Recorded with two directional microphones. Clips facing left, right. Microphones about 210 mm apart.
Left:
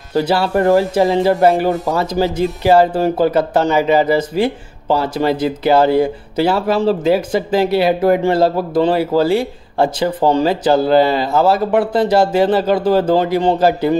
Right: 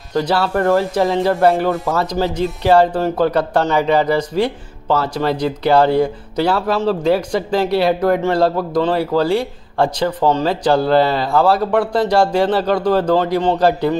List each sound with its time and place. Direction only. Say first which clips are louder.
0.1 s speech: left 2 dB; 10° left (ahead or behind)
0.9 s speech: left 2 dB; 5° left (ahead or behind)